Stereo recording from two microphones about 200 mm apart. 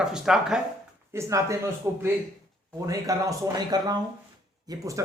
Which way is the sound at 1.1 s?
15° right (ahead or behind).